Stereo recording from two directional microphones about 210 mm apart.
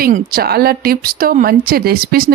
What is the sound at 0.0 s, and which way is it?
Speech, 45° right (ahead or behind).